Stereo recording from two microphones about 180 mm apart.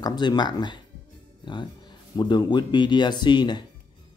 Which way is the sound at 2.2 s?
25° left (ahead or behind).